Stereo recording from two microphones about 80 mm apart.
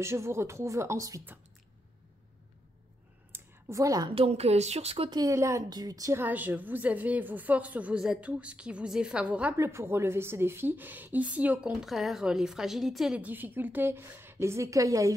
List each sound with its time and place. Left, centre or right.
0.0 s speech: right
3.3 s clicking: right
3.7 s a woman's voice: right
5.1 s speech: right
5.7 s a woman's voice: right
6.1 s a woman's voice: right
9.6 s a woman's voice: right
11.8 s a woman's voice: centre
13.2 s a woman's voice: right